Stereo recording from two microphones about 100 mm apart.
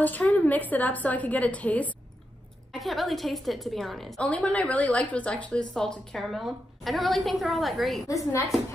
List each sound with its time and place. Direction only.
0.0 s speech: 15° left (ahead or behind)
2.7 s a woman's voice: centre (ahead or behind)
4.2 s speech: 15° left (ahead or behind)
8.1 s a woman's voice: 35° left (ahead or behind)